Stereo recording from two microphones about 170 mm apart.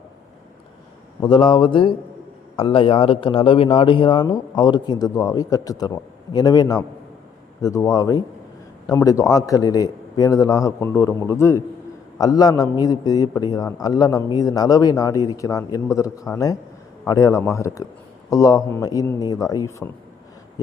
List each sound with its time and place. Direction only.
1.2 s a man's voice: 30° left (ahead or behind)